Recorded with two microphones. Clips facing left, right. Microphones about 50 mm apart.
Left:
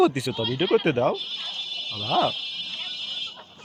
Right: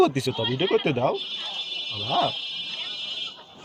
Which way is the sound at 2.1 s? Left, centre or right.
Centre.